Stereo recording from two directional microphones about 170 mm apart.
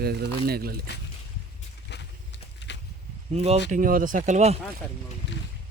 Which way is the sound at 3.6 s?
50° right (ahead or behind).